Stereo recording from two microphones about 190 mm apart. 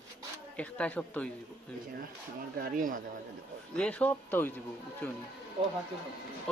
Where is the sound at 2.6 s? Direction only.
45° right (ahead or behind).